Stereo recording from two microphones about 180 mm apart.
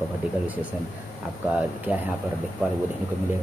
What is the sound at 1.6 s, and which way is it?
Speech, 10° right (ahead or behind).